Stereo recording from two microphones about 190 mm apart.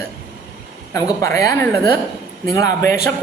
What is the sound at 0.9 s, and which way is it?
A woman's voice, 15° left (ahead or behind).